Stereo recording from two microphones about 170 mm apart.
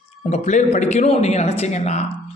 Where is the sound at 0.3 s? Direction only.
40° left (ahead or behind).